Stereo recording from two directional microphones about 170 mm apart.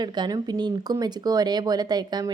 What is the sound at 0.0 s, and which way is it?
Speech, 25° right (ahead or behind).